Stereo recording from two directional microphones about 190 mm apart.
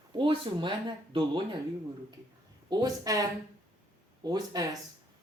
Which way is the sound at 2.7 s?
20° right (ahead or behind).